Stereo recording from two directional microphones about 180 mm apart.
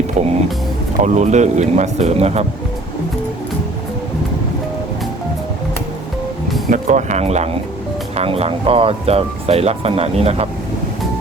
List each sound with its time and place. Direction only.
0.2 s speech: 40° right (ahead or behind)
6.7 s speech: 45° right (ahead or behind)